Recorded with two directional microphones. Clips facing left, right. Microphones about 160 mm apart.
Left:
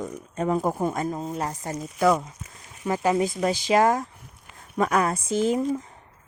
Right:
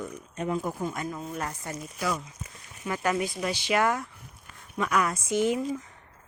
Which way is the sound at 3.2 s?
40° left (ahead or behind).